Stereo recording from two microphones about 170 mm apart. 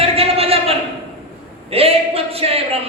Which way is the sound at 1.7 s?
35° right (ahead or behind).